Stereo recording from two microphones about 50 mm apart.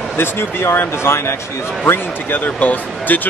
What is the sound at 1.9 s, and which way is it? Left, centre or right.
Speech, left.